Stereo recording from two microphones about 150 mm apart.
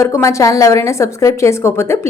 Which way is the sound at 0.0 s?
20° left (ahead or behind).